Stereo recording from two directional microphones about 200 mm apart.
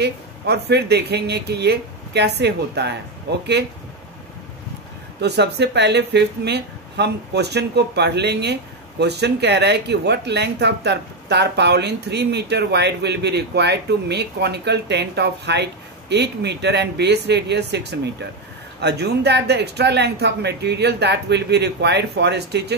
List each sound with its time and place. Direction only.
0.0 s speech: 55° right (ahead or behind)
5.2 s speech: 55° right (ahead or behind)